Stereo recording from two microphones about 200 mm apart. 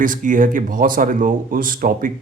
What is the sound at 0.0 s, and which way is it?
Speech, 40° right (ahead or behind).